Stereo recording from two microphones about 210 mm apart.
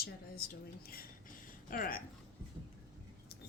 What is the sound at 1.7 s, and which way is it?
Speech, 45° left (ahead or behind).